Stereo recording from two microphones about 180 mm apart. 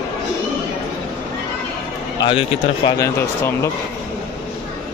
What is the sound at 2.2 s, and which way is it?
Speech, 30° left (ahead or behind).